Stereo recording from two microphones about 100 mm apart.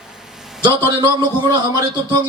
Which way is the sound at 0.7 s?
50° right (ahead or behind).